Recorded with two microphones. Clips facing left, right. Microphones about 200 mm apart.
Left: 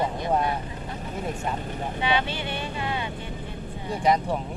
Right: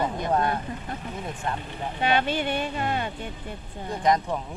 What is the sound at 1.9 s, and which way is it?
Speech, 50° right (ahead or behind).